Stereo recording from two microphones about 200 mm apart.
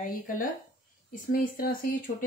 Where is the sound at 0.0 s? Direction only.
40° left (ahead or behind).